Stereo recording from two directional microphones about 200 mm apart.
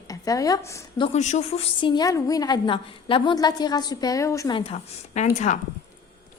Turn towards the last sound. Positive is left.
turn(degrees=35)  # may be behind; listen again after turning